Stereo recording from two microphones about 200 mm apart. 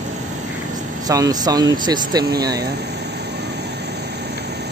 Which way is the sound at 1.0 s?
20° right (ahead or behind).